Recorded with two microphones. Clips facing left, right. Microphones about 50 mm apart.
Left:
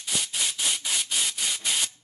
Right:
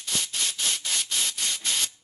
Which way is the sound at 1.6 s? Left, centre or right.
Centre.